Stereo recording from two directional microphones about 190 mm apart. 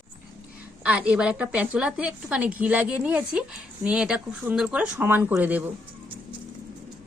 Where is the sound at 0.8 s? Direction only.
5° right (ahead or behind).